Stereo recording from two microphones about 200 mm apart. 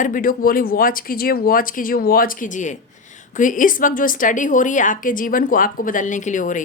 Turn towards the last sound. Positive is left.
turn(degrees=40)  # may be behind; listen again after turning